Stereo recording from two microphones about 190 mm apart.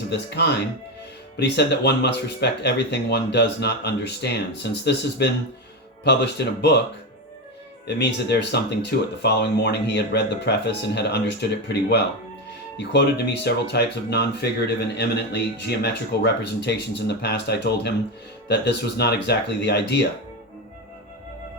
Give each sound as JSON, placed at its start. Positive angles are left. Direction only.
{"t": 0.1, "sound": "speech", "side_deg": 60}
{"t": 7.9, "sound": "speech", "side_deg": 65}